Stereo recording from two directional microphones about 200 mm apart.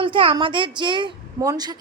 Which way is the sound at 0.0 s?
25° right (ahead or behind).